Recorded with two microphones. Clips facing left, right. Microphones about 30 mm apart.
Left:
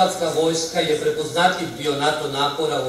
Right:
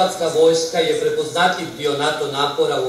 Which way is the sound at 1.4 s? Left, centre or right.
Right.